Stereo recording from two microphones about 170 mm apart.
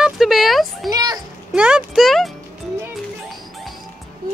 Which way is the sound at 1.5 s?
5° right (ahead or behind).